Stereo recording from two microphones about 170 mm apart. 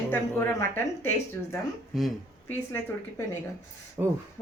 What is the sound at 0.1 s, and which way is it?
A woman's voice, 10° left (ahead or behind).